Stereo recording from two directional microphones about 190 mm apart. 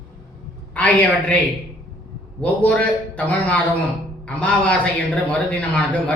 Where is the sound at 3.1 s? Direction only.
10° left (ahead or behind).